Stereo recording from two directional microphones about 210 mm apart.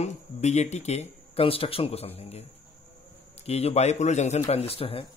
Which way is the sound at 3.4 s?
30° left (ahead or behind).